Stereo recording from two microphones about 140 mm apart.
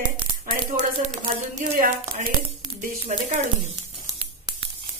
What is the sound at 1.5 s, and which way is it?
Speech, 90° right.